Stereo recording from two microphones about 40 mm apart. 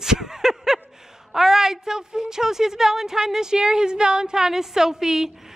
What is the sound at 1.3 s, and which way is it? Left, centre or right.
A woman's voice, centre.